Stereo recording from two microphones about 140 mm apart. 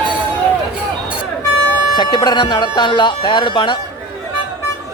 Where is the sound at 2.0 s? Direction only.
30° left (ahead or behind).